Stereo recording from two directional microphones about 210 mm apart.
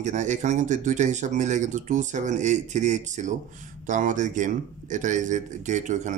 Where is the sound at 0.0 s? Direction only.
35° right (ahead or behind).